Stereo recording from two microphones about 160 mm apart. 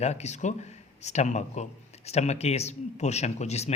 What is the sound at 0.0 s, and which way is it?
Speech, 45° left (ahead or behind).